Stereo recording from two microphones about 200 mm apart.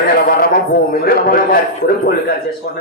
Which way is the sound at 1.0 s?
50° left (ahead or behind).